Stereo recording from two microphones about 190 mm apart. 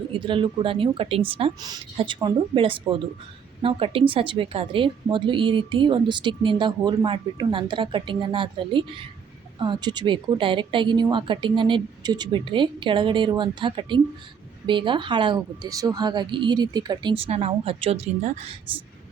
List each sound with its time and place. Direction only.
0.1 s a woman's voice: 25° right (ahead or behind)